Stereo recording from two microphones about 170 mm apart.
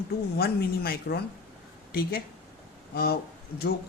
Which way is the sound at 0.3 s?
65° left (ahead or behind).